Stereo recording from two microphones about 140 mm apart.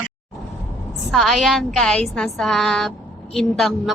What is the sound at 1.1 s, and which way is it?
A woman's voice, centre (ahead or behind).